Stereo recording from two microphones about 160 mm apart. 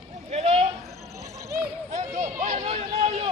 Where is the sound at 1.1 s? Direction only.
20° right (ahead or behind).